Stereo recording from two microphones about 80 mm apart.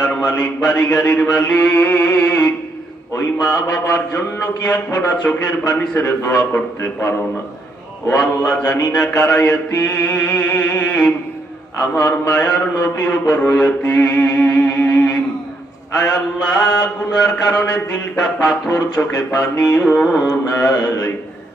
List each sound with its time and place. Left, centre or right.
0.2 s a man's voice: centre
0.7 s mantra: centre
3.4 s mantra: centre
6.2 s speech: left
8.5 s mantra: centre